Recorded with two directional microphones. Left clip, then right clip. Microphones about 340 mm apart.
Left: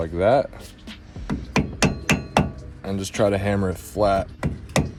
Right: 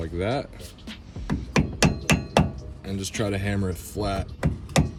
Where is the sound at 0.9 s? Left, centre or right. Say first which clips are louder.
Left 1 dB; centre.